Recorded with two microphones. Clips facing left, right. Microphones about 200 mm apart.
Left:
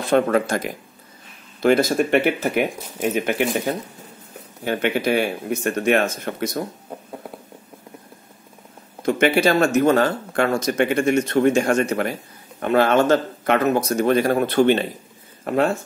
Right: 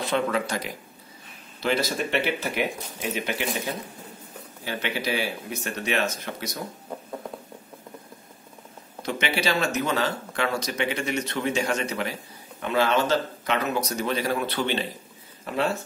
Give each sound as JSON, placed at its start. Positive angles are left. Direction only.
{"t": 0.0, "sound": "speech", "side_deg": 50}
{"t": 9.0, "sound": "speech", "side_deg": 50}